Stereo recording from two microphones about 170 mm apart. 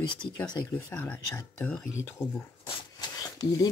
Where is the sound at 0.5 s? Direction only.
20° left (ahead or behind).